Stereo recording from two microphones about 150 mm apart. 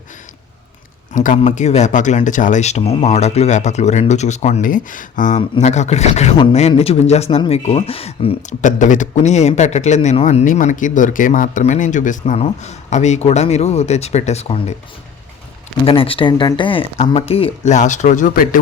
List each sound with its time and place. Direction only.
1.1 s a man's voice: 60° left (ahead or behind)
5.4 s a man's voice: 45° left (ahead or behind)
8.4 s a man's voice: 55° left (ahead or behind)
10.4 s a man's voice: 60° left (ahead or behind); by 14.6 s 45° left (ahead or behind)
15.9 s a man's voice: 35° left (ahead or behind); by 18.6 s 60° left (ahead or behind)